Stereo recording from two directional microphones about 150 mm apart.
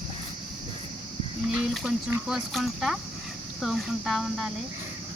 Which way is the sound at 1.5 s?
Centre (ahead or behind).